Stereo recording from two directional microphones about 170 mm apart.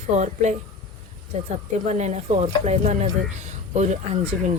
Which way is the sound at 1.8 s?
45° right (ahead or behind).